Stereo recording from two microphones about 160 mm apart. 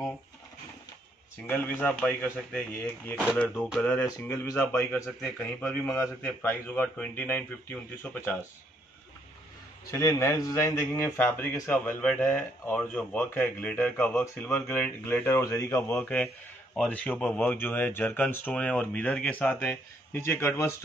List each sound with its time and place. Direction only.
1.5 s a man's voice: 10° left (ahead or behind)
9.8 s a man's voice: 20° left (ahead or behind)